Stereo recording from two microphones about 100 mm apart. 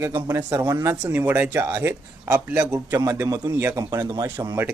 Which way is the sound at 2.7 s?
35° right (ahead or behind).